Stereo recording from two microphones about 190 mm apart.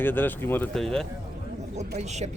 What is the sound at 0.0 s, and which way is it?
Speech, 10° left (ahead or behind).